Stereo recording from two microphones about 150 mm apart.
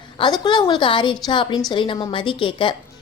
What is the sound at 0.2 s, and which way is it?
A woman's voice, 30° left (ahead or behind).